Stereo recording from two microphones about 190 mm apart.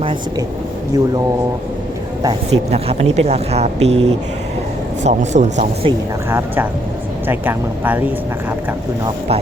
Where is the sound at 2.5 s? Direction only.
35° right (ahead or behind).